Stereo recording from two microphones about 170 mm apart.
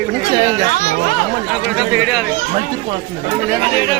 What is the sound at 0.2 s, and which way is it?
Speech, 20° right (ahead or behind).